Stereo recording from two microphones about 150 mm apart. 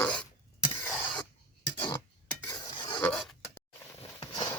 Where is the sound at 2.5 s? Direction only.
30° left (ahead or behind).